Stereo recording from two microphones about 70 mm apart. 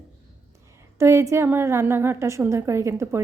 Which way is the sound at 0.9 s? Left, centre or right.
Right.